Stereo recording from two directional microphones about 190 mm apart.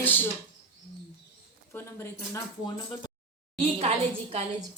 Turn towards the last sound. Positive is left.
turn(degrees=-30)  # may be behind; listen again after turning